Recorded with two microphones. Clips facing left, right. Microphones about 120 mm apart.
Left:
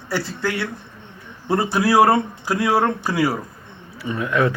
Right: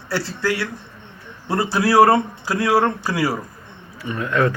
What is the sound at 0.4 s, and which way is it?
Speech, 25° left (ahead or behind).